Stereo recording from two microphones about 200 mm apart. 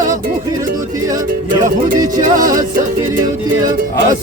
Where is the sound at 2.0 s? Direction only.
20° right (ahead or behind).